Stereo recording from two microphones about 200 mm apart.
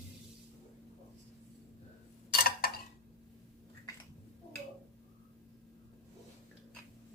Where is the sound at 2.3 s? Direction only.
50° left (ahead or behind).